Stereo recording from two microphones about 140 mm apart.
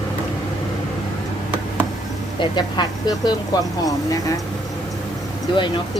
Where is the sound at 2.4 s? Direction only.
30° left (ahead or behind).